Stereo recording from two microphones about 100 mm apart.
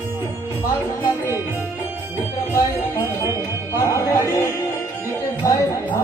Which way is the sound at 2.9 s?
20° left (ahead or behind).